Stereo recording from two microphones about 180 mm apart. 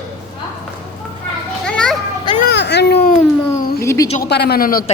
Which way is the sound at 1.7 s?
5° left (ahead or behind).